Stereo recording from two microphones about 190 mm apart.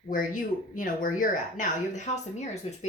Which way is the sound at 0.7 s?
45° left (ahead or behind).